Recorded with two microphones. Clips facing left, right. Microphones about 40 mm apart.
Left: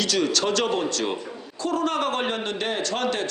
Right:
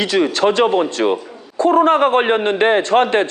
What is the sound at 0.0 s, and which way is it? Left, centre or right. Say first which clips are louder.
A man's voice: right 8 dB; right.